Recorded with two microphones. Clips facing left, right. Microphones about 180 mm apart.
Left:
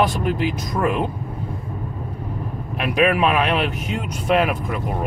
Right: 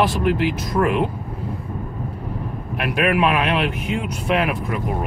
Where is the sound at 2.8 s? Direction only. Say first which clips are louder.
Left 1 dB; centre (ahead or behind).